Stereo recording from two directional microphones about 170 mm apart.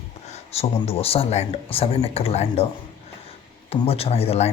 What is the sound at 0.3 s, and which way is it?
Speech, 35° left (ahead or behind).